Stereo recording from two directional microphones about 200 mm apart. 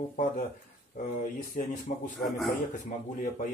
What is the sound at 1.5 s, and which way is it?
Speech, 40° left (ahead or behind).